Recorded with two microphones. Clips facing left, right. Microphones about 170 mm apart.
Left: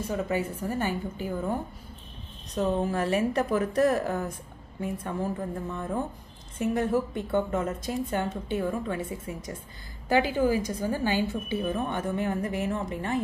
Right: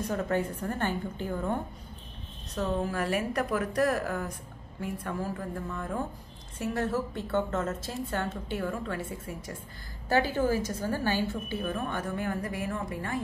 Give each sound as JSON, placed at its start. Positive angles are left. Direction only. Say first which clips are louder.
{"t": 0.0, "sound": "a woman's voice", "louder": "left 1 dB", "side_deg": 5}
{"t": 2.5, "sound": "a woman's voice", "louder": "left 4 dB", "side_deg": 20}
{"t": 10.0, "sound": "a woman's voice", "louder": "left 2 dB", "side_deg": 15}